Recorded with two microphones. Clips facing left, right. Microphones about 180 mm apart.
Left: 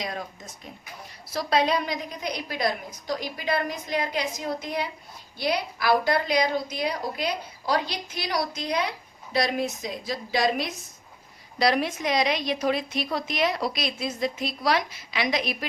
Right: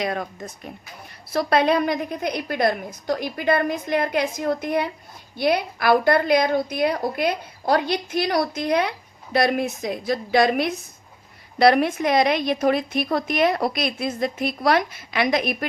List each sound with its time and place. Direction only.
0.0 s a woman's voice: 60° right (ahead or behind)